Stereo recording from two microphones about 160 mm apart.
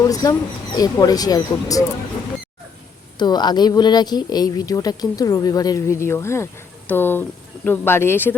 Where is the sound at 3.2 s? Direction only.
25° left (ahead or behind).